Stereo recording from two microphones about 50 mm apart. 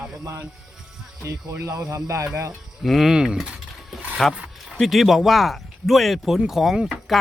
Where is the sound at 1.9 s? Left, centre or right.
Right.